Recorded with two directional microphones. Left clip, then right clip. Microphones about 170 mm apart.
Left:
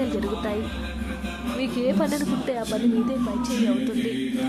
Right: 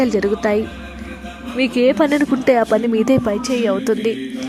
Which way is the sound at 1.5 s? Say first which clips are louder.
Right 10 dB; 40° right (ahead or behind).